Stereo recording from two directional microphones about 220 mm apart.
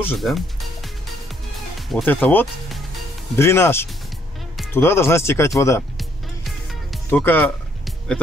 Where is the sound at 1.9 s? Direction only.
5° left (ahead or behind).